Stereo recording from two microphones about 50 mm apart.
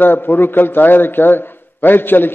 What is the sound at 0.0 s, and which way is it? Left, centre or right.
A man's voice, left.